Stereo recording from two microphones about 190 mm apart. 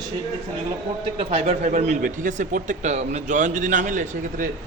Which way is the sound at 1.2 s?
35° right (ahead or behind).